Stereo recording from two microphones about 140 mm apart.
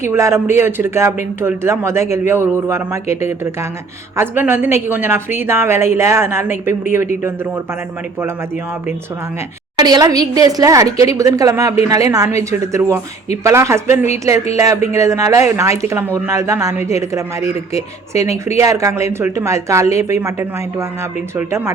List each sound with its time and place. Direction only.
0.0 s speech: 20° right (ahead or behind)
4.2 s a woman's voice: 15° right (ahead or behind)
9.7 s speech: 30° right (ahead or behind)
18.3 s speech: 50° left (ahead or behind)
18.6 s a woman's voice: 20° right (ahead or behind)